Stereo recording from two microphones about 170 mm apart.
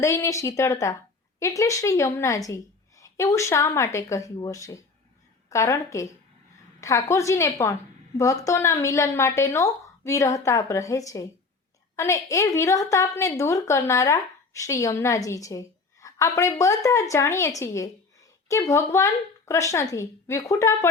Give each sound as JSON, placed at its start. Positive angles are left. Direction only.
{"t": 0.0, "sound": "a woman's voice", "side_deg": 15}